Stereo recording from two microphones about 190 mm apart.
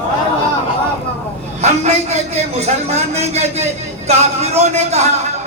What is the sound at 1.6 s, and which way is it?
A man's voice, 35° right (ahead or behind).